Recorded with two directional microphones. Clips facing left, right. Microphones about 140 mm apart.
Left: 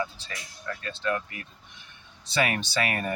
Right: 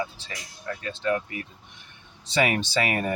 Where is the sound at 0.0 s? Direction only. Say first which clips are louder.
Even; 15° right (ahead or behind).